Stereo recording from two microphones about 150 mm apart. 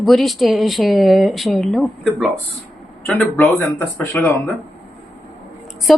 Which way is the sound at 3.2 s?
15° left (ahead or behind).